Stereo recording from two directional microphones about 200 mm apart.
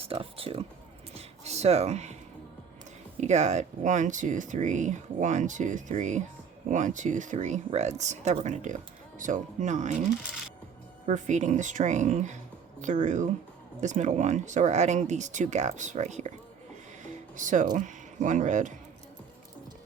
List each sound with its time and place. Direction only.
0.0 s speech: 30° right (ahead or behind)
1.1 s a sound: 30° right (ahead or behind)
3.2 s speech: 35° right (ahead or behind)
17.3 s speech: 40° right (ahead or behind)